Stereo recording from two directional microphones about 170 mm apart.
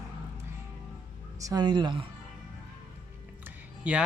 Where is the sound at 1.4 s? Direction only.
25° right (ahead or behind).